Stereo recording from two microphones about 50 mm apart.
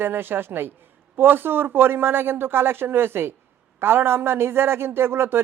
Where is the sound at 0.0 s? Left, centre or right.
Right.